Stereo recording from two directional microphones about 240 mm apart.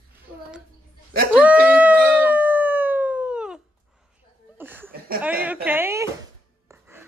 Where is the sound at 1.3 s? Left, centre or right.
Centre.